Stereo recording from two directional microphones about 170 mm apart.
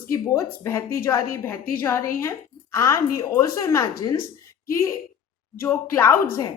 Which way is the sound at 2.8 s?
15° left (ahead or behind).